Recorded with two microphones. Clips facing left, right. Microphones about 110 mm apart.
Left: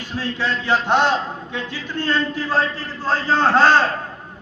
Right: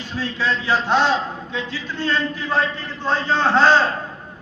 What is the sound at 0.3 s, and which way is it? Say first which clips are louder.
Speech: even; 15° left (ahead or behind).